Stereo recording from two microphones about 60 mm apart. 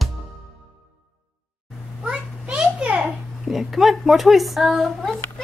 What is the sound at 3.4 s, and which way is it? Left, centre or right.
A woman's voice, centre.